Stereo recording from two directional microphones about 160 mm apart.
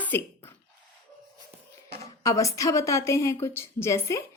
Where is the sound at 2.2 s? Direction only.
20° left (ahead or behind).